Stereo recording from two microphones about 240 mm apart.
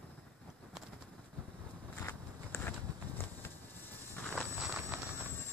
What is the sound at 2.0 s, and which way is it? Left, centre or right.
Biting, centre.